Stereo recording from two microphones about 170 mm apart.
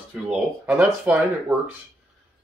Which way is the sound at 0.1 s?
10° right (ahead or behind).